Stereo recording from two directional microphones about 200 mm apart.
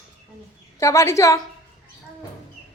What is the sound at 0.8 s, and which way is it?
Speech, 15° left (ahead or behind).